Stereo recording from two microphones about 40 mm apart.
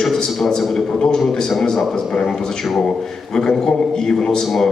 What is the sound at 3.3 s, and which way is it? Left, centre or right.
A man's voice, centre.